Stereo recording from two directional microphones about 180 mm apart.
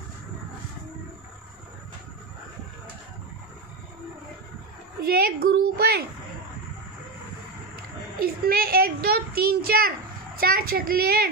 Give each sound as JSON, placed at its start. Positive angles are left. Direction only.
{"t": 5.0, "sound": "a woman's voice", "side_deg": -60}
{"t": 8.2, "sound": "a child's voice", "side_deg": -55}